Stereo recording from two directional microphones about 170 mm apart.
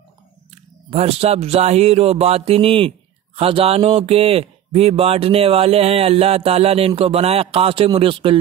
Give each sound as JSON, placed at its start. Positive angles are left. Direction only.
{"t": 0.8, "sound": "speech", "side_deg": -35}